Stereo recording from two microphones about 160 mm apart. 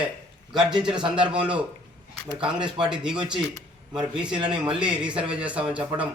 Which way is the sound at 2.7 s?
5° right (ahead or behind).